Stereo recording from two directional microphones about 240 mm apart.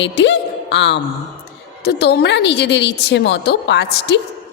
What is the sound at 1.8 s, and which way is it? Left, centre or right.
A woman's voice, left.